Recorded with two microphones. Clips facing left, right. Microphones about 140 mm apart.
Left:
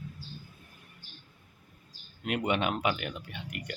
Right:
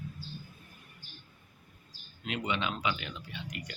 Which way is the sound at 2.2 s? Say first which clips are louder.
Left 5 dB; 55° left (ahead or behind).